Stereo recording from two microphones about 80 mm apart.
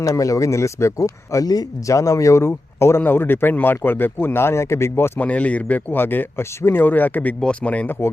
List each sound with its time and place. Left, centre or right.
0.0 s speech: left
5.2 s speech: centre